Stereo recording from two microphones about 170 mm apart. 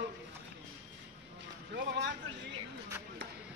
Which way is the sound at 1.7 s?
90° right.